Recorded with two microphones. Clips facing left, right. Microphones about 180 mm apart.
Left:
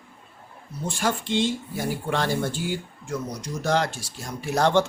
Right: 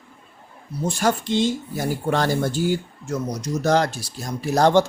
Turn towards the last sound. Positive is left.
turn(degrees=-35)  # may be behind; listen again after turning